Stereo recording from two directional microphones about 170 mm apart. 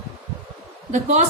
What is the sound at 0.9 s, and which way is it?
Speech, 45° right (ahead or behind).